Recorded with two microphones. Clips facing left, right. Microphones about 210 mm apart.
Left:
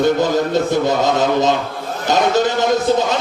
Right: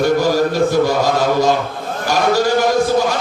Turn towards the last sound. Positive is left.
turn(degrees=20)  # may be behind; listen again after turning